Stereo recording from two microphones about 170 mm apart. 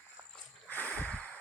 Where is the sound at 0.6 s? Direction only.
10° left (ahead or behind).